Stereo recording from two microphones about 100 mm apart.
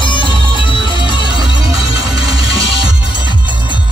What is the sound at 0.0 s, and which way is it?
Music, 55° left (ahead or behind).